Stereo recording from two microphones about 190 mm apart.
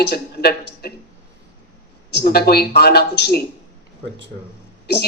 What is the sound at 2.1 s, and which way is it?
A woman's voice, 55° left (ahead or behind).